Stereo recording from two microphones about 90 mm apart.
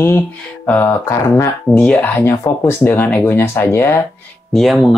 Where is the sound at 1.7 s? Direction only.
15° left (ahead or behind).